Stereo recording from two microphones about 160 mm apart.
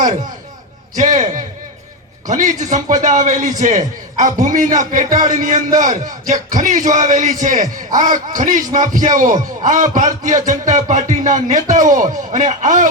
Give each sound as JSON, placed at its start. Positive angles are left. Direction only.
{"t": 0.9, "sound": "a man's voice", "side_deg": -50}